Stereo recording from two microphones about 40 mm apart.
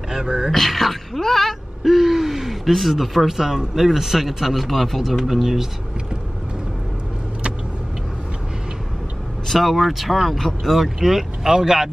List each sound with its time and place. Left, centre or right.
0.1 s speech: centre
0.5 s speech: centre
9.5 s speech: centre